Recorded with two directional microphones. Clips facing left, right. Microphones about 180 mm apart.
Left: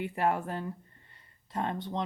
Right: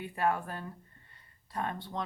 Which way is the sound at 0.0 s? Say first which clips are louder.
Left 2 dB; 25° left (ahead or behind).